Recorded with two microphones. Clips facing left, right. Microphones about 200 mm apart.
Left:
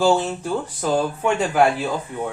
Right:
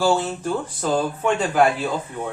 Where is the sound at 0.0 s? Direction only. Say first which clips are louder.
Left 2 dB; 15° left (ahead or behind).